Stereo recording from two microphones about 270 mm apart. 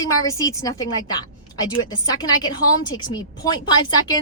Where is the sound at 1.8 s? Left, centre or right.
Centre.